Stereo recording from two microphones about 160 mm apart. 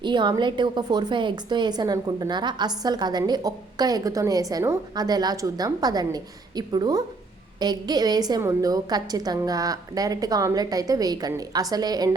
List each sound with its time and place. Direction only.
0.0 s a woman's voice: 30° right (ahead or behind)